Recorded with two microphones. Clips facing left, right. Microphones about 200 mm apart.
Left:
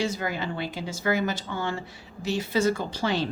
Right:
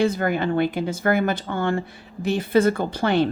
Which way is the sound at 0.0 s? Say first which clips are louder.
Right 8 dB; 55° right (ahead or behind).